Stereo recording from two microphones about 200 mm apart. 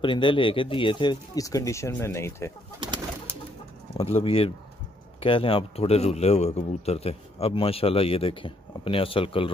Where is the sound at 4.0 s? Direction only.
30° left (ahead or behind).